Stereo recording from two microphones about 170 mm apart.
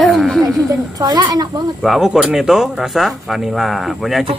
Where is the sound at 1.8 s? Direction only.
Centre (ahead or behind).